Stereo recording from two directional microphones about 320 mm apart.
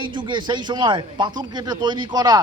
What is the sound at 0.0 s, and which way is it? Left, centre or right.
Speech, centre.